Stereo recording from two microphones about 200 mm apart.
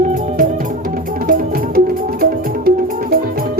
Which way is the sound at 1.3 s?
50° right (ahead or behind).